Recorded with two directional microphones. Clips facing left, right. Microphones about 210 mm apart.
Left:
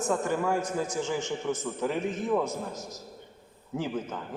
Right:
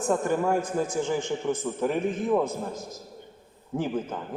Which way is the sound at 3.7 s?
55° right (ahead or behind).